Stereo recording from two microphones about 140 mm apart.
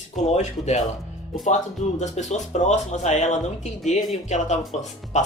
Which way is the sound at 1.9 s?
55° left (ahead or behind).